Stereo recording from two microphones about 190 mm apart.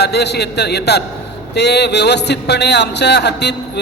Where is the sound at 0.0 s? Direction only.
60° left (ahead or behind).